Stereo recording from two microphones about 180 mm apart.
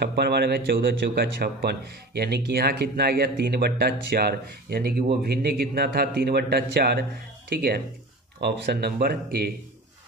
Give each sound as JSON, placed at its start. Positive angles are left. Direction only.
{"t": 0.0, "sound": "speech", "side_deg": -65}